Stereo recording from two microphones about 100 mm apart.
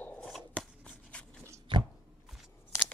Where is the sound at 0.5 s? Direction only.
10° left (ahead or behind).